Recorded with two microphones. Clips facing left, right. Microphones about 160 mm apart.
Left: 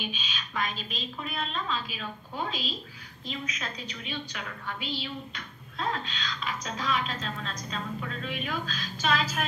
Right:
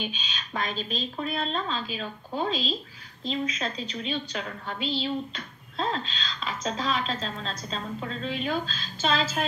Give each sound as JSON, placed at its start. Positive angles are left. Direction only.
{"t": 0.0, "sound": "a woman's voice", "side_deg": -35}